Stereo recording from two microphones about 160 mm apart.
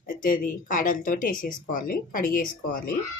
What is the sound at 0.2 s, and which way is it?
Speech, 60° left (ahead or behind).